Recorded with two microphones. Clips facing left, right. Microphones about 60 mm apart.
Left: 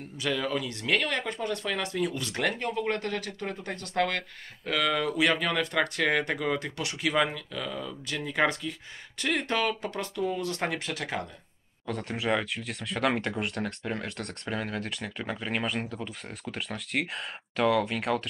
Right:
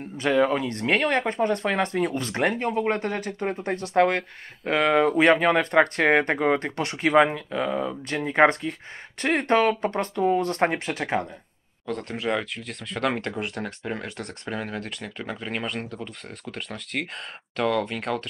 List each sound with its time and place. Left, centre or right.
0.2 s speech: right
11.9 s speech: centre